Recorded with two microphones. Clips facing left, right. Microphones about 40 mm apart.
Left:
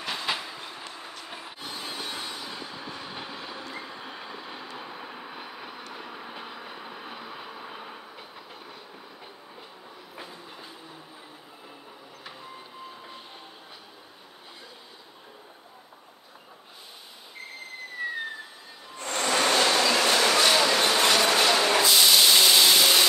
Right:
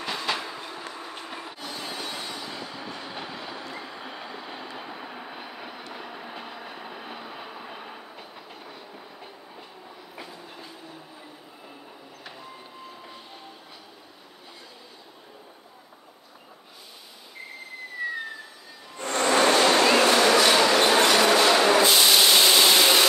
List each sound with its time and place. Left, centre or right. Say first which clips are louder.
0.0 s train: right 2 dB; centre
18.9 s a sound: right 4 dB; right
19.7 s train: right 4 dB; right
20.3 s a sound: right 3 dB; right
21.4 s music: right 3 dB; centre
21.6 s vehicle: right 2 dB; right